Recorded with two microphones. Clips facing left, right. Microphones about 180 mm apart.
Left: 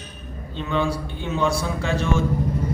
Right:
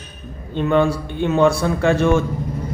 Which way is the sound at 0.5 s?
55° right (ahead or behind).